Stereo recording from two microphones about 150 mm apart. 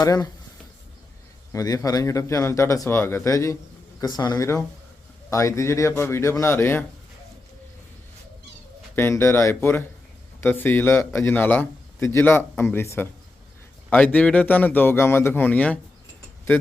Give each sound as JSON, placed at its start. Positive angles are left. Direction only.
{"t": 0.0, "sound": "speech", "side_deg": 25}
{"t": 1.5, "sound": "a man's voice", "side_deg": 25}
{"t": 9.0, "sound": "a man's voice", "side_deg": 15}